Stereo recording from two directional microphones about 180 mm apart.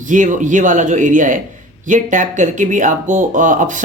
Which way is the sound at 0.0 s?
45° right (ahead or behind).